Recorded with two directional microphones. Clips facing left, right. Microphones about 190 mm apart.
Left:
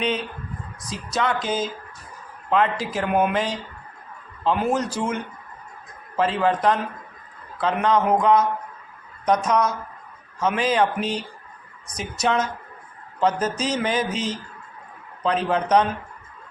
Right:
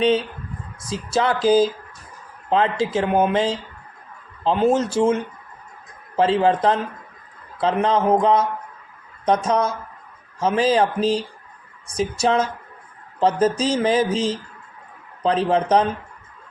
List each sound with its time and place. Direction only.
0.9 s speech: 30° right (ahead or behind)